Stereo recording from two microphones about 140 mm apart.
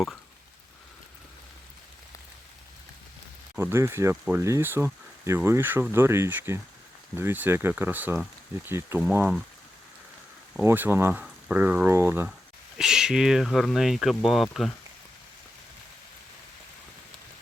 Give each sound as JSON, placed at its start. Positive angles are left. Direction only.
{"t": 3.6, "sound": "speech", "side_deg": -20}
{"t": 10.6, "sound": "speech", "side_deg": -15}
{"t": 12.7, "sound": "speech", "side_deg": -5}